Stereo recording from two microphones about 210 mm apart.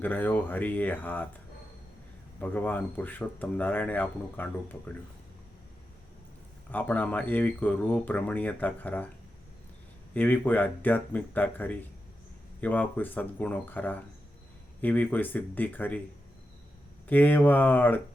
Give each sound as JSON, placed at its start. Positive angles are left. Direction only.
{"t": 0.0, "sound": "speech", "side_deg": 10}
{"t": 2.4, "sound": "speech", "side_deg": 10}
{"t": 6.7, "sound": "speech", "side_deg": 10}
{"t": 10.2, "sound": "speech", "side_deg": 10}
{"t": 17.1, "sound": "speech", "side_deg": 10}